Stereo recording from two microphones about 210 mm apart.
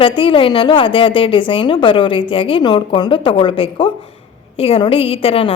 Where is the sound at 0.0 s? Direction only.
25° left (ahead or behind).